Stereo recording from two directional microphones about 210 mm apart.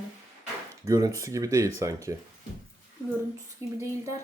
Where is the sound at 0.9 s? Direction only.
15° right (ahead or behind).